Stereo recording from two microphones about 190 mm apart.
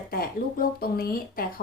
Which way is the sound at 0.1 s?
50° left (ahead or behind).